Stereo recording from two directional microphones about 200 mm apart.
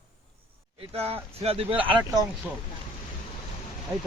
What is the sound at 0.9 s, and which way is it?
Speech, 30° right (ahead or behind).